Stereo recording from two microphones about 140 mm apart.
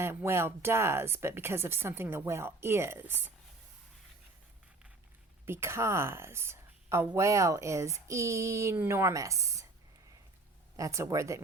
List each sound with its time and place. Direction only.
0.0 s speech: 15° right (ahead or behind)
5.5 s a woman's voice: 15° right (ahead or behind)
10.8 s a woman's voice: 20° right (ahead or behind)